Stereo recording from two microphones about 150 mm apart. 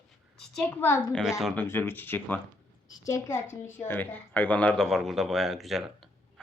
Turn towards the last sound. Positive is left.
turn(degrees=0)  # may be behind; listen again after turning